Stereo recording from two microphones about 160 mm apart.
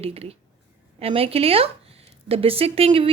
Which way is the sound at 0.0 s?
40° right (ahead or behind).